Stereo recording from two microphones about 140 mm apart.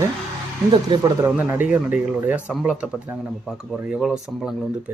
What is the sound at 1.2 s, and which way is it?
Speech, 15° right (ahead or behind).